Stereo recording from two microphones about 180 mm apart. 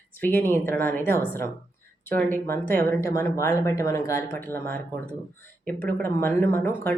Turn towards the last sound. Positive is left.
turn(degrees=10)  # may be behind; listen again after turning